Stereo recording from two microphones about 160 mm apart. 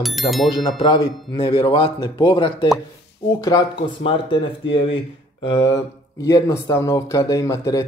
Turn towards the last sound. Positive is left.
turn(degrees=20)  # may be behind; listen again after turning